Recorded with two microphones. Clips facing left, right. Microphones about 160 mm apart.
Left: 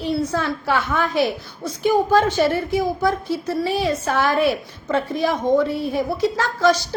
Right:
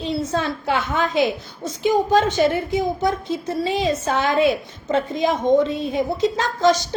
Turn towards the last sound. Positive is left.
turn(degrees=-20)  # may be behind; listen again after turning